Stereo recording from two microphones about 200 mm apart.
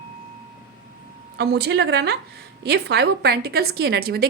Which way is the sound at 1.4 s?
55° right (ahead or behind).